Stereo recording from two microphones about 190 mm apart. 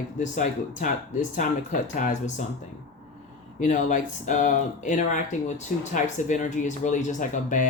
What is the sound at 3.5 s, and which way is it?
Speech, 40° left (ahead or behind).